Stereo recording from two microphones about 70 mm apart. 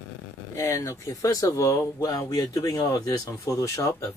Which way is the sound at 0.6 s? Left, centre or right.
Left.